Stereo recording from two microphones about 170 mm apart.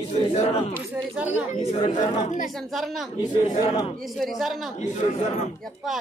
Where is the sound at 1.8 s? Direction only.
35° left (ahead or behind).